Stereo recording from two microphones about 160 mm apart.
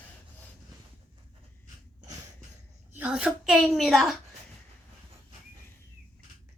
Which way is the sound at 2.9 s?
10° right (ahead or behind).